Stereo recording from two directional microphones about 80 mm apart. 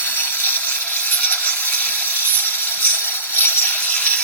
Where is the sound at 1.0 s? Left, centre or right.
Centre.